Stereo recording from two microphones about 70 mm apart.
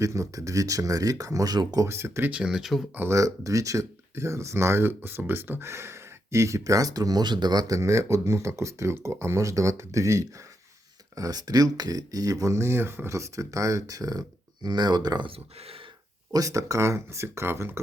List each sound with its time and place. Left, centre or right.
0.0 s speech: right
1.9 s speech: right
2.3 s speech: centre
3.1 s speech: right
7.8 s speech: right
11.1 s speech: right
13.1 s speech: right
16.3 s speech: right